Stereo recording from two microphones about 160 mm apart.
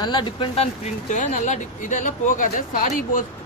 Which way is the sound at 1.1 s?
50° left (ahead or behind).